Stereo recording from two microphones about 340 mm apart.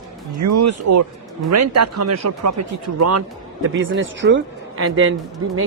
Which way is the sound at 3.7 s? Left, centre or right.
Right.